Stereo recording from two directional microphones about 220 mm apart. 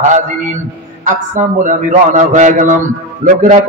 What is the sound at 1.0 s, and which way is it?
A man's voice, 35° right (ahead or behind).